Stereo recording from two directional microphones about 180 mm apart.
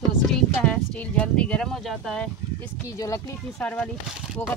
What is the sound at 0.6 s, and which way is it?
Speech, 5° left (ahead or behind).